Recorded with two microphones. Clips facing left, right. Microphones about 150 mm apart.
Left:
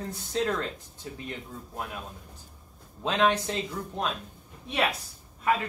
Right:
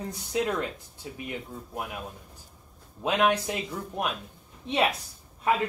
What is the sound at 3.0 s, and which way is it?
A woman's voice, 10° right (ahead or behind).